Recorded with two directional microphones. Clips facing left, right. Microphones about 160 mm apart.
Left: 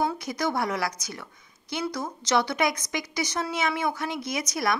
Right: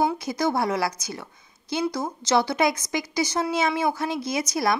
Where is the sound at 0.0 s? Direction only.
25° right (ahead or behind).